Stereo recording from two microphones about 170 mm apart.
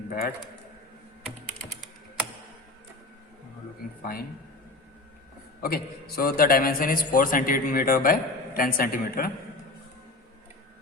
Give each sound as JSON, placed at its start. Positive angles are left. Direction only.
{"t": 0.1, "sound": "a man's voice", "side_deg": 60}
{"t": 5.6, "sound": "a man's voice", "side_deg": 65}